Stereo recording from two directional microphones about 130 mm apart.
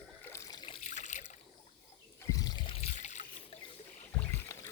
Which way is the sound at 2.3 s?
30° left (ahead or behind).